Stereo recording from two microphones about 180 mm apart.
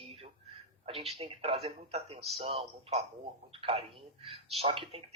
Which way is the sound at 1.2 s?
35° right (ahead or behind).